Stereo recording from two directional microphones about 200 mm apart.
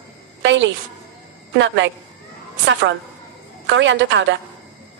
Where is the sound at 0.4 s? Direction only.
65° right (ahead or behind).